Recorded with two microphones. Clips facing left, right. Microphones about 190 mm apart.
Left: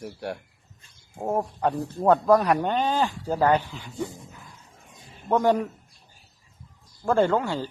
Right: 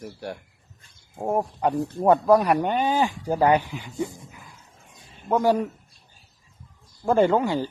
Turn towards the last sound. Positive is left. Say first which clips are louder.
# right 2 dB
turn(degrees=-15)  # may be behind; listen again after turning